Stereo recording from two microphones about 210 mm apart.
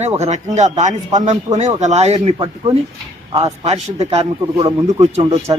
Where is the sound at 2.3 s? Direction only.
20° right (ahead or behind).